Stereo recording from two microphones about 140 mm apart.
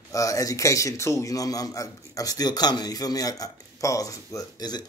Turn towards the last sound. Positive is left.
turn(degrees=30)  # may be behind; listen again after turning